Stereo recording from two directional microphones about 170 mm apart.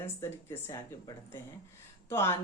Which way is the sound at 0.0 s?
15° left (ahead or behind).